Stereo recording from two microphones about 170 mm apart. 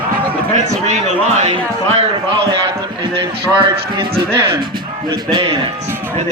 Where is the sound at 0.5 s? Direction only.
40° right (ahead or behind).